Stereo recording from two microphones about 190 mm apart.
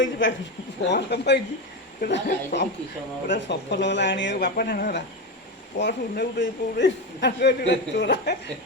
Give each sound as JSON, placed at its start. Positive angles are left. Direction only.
{"t": 0.0, "sound": "speech", "side_deg": 75}
{"t": 0.9, "sound": "a man's voice", "side_deg": 60}
{"t": 5.8, "sound": "a man's voice", "side_deg": 65}